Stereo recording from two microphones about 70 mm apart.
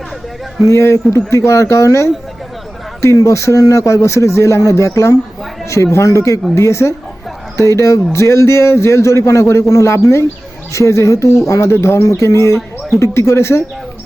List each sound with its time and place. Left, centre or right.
0.7 s a man's voice: left